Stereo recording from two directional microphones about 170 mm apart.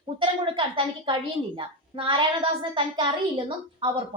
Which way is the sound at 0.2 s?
30° right (ahead or behind).